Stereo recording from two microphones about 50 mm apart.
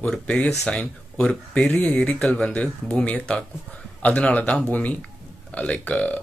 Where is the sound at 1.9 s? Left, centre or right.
Left.